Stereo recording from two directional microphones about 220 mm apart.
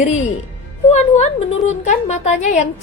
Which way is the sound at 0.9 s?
30° left (ahead or behind).